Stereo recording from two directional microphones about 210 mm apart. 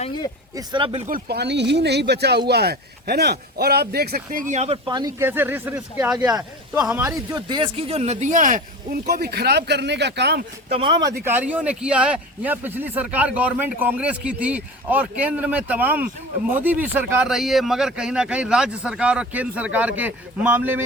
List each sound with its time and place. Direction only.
0.5 s speech: 20° right (ahead or behind)
1.0 s speech: 45° right (ahead or behind); by 7.4 s 10° right (ahead or behind)
7.4 s speech: 25° right (ahead or behind); by 10.4 s 55° right (ahead or behind)
10.7 s speech: 25° right (ahead or behind)
11.2 s speech: 10° right (ahead or behind)